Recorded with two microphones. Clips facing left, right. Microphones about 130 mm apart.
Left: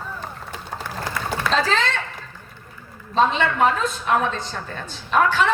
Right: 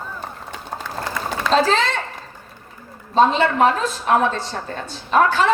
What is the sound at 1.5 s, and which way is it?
Speech, 40° right (ahead or behind).